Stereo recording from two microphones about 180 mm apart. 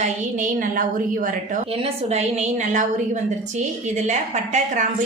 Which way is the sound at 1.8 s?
40° right (ahead or behind).